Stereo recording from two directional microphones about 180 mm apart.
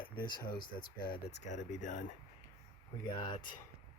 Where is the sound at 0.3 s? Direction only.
25° left (ahead or behind).